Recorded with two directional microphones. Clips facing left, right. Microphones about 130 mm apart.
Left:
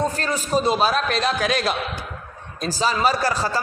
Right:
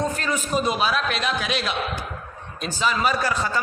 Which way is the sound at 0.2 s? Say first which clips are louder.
Left 2 dB; 35° left (ahead or behind).